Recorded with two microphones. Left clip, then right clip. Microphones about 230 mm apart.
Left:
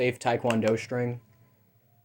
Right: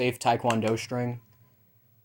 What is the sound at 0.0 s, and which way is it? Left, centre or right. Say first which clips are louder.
Speech: right 1 dB; right.